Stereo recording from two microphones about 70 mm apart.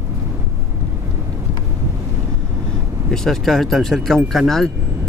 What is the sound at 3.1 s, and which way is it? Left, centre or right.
Speech, centre.